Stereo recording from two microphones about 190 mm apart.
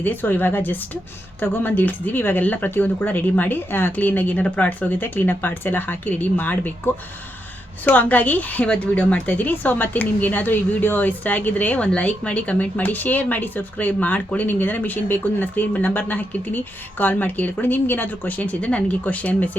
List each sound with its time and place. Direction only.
0.0 s a woman's voice: 10° left (ahead or behind)